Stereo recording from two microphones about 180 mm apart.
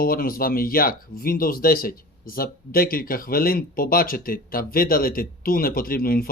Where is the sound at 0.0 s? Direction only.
55° left (ahead or behind).